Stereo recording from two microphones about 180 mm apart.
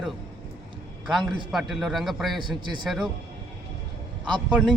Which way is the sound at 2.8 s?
Centre (ahead or behind).